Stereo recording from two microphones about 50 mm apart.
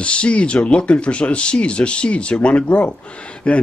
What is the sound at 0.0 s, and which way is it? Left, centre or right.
Speech, left.